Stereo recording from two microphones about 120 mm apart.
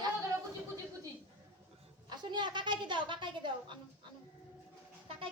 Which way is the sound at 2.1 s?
40° right (ahead or behind).